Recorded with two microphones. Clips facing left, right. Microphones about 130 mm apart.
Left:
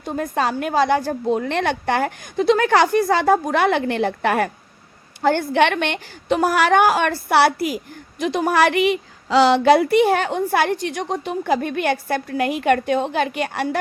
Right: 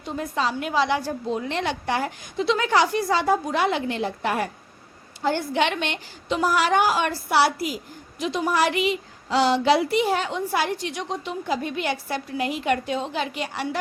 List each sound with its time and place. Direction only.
0.0 s a woman's voice: 55° left (ahead or behind); by 9.6 s 80° left
9.6 s a woman's voice: 55° left (ahead or behind)